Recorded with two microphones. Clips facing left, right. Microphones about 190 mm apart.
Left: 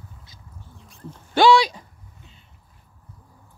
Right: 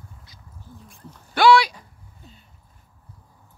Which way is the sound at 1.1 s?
25° left (ahead or behind).